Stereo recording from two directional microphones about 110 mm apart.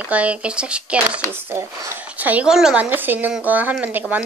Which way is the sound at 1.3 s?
25° right (ahead or behind).